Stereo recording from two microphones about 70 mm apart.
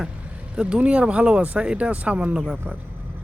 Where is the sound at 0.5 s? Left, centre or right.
Centre.